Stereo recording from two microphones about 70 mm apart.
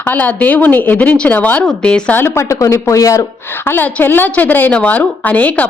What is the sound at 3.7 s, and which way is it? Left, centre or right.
A woman's voice, left.